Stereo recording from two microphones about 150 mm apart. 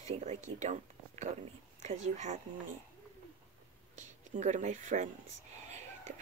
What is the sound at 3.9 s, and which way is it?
Speech, 55° right (ahead or behind).